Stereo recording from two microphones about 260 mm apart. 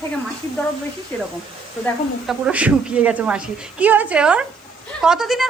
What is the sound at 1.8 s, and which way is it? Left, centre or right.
Speech, centre.